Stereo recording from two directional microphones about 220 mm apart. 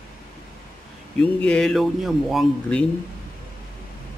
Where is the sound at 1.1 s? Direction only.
5° left (ahead or behind).